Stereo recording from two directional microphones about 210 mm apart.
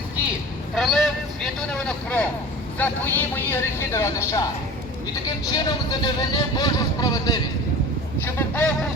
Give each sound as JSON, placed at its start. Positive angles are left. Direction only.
{"t": 0.8, "sound": "speech", "side_deg": 0}
{"t": 5.5, "sound": "speech", "side_deg": 20}